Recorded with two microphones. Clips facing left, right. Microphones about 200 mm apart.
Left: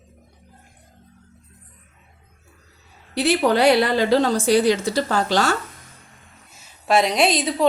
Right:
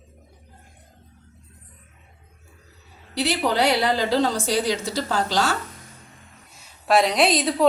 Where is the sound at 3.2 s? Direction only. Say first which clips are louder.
Left 4 dB; 55° left (ahead or behind).